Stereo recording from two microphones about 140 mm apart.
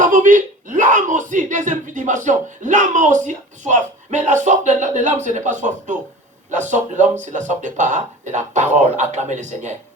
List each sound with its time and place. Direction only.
0.0 s speech: 65° right (ahead or behind)